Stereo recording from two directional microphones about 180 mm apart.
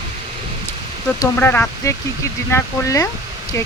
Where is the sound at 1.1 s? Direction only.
10° left (ahead or behind).